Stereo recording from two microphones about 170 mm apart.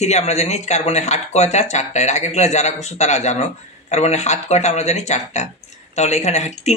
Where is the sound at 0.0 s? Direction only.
40° left (ahead or behind).